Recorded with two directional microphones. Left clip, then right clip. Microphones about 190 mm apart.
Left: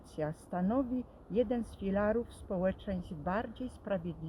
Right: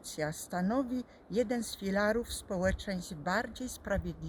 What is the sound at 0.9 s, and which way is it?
Speech, 55° right (ahead or behind).